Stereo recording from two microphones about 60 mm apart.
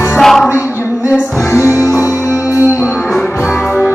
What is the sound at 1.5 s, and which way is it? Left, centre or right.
Music, left.